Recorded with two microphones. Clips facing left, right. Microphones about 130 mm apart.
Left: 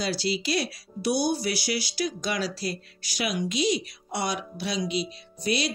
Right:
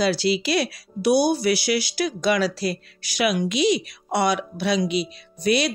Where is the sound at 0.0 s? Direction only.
70° right (ahead or behind).